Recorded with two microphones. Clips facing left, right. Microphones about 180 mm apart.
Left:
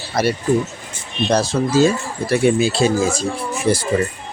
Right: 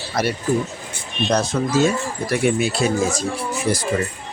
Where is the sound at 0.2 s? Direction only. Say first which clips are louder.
Left 3 dB; 30° left (ahead or behind).